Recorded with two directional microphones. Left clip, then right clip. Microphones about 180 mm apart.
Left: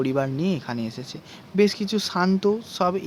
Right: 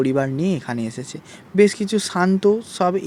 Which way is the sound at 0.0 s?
20° right (ahead or behind).